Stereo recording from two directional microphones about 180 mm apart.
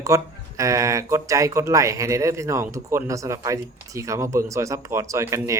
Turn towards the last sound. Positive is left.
turn(degrees=-15)  # may be behind; listen again after turning